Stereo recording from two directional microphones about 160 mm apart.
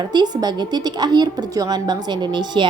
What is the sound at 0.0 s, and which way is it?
A woman's voice, 25° right (ahead or behind).